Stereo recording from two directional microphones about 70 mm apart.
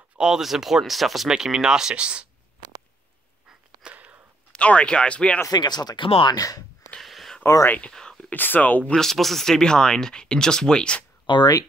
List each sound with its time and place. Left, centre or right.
0.2 s speech: centre
3.9 s a sound: centre
4.5 s speech: centre
5.5 s speech: left
7.0 s a sound: centre
7.4 s speech: left
7.9 s whispering: centre
8.3 s speech: left
8.9 s speech: centre